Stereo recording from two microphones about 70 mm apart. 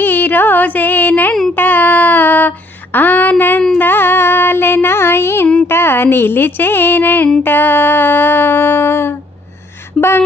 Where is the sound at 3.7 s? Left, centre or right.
Left.